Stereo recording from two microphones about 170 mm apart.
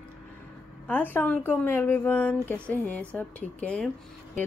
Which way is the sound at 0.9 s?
10° left (ahead or behind).